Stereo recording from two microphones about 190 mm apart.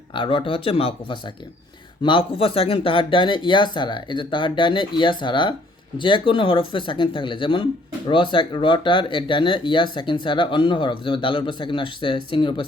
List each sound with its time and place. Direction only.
0.1 s speech: 25° left (ahead or behind)